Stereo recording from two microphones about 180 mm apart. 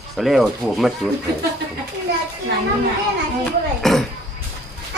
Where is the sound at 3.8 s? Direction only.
Centre (ahead or behind).